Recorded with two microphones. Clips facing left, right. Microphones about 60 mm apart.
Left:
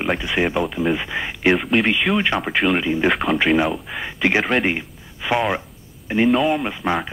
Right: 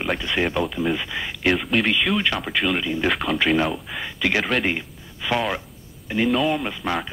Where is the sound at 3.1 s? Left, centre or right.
Centre.